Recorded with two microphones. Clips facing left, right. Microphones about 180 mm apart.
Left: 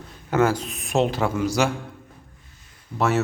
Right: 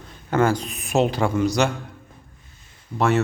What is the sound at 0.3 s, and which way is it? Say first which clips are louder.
A man's voice: even; 5° left (ahead or behind).